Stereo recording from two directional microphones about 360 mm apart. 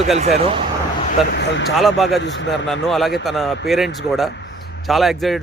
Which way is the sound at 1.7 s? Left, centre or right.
Centre.